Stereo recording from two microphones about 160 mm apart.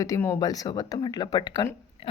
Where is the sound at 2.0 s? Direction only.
35° left (ahead or behind).